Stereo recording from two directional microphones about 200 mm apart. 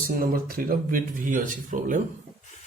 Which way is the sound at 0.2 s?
45° right (ahead or behind).